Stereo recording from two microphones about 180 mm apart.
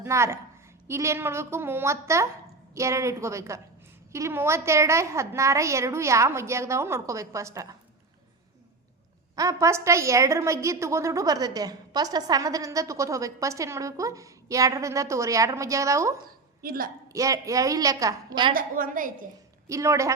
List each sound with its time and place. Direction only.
0.0 s a woman's voice: 15° right (ahead or behind)
9.3 s a woman's voice: 20° right (ahead or behind)
16.6 s a woman's voice: 55° right (ahead or behind)
17.1 s a woman's voice: 20° right (ahead or behind)
18.5 s a woman's voice: 50° right (ahead or behind)
19.6 s a woman's voice: 15° right (ahead or behind)